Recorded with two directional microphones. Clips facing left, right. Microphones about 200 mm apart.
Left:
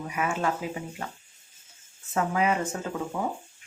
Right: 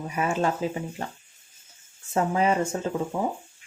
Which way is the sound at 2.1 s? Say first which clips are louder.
Right 3 dB; 30° right (ahead or behind).